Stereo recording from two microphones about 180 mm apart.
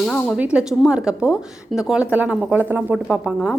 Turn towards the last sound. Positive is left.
turn(degrees=-5)  # may be behind; listen again after turning